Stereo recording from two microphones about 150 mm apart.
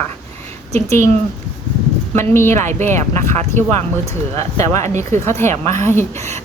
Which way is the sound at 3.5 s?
15° left (ahead or behind).